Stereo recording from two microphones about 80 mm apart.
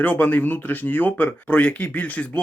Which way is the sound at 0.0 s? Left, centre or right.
Left.